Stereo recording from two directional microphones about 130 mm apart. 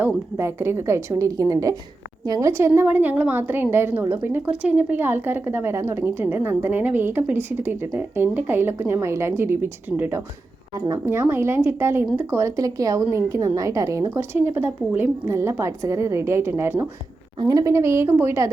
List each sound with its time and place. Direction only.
0.0 s a woman's voice: 20° right (ahead or behind)
2.5 s a woman's voice: 20° right (ahead or behind)
10.8 s a woman's voice: 30° right (ahead or behind)